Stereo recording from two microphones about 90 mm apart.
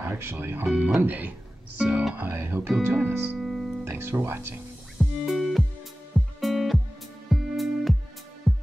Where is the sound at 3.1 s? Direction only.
Centre (ahead or behind).